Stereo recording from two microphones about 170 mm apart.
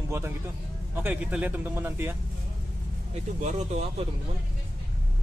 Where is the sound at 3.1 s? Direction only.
40° right (ahead or behind).